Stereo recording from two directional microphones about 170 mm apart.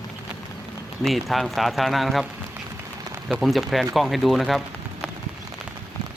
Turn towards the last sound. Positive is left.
turn(degrees=0)  # may be behind; listen again after turning